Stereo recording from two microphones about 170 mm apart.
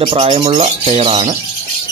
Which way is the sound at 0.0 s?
35° right (ahead or behind).